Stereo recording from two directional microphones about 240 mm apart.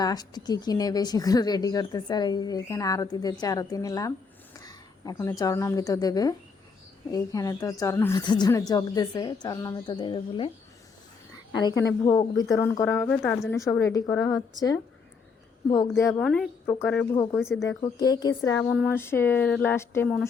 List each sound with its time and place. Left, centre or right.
0.0 s speech: centre
11.5 s speech: centre
16.0 s speech: centre
17.8 s speech: centre